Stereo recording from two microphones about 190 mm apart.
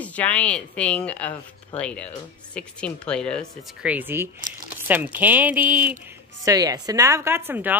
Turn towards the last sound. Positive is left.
turn(degrees=-10)  # may be behind; listen again after turning